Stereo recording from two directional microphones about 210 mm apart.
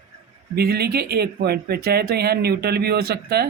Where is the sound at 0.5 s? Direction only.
50° right (ahead or behind).